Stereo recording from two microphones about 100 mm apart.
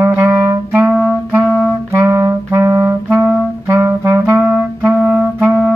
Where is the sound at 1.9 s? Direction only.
30° right (ahead or behind).